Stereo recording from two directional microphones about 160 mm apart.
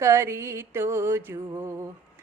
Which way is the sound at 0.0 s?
15° right (ahead or behind).